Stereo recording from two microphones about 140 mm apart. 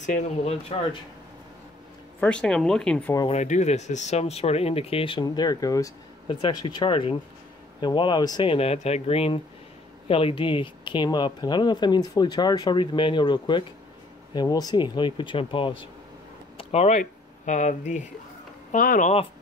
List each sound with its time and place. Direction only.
2.1 s speech: 5° left (ahead or behind)
3.3 s speech: 55° left (ahead or behind); by 5.2 s 40° left (ahead or behind)
5.2 s speech: 30° left (ahead or behind)
6.2 s speech: 35° left (ahead or behind)
16.5 s speech: 50° left (ahead or behind); by 19.1 s 65° left (ahead or behind)